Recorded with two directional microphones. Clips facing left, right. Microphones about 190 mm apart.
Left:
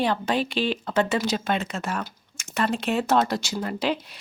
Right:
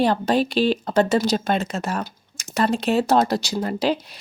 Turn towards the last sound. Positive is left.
turn(degrees=-35)  # may be behind; listen again after turning